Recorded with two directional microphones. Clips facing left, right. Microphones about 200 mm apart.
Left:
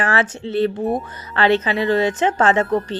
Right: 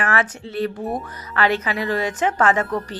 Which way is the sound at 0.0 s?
30° left (ahead or behind).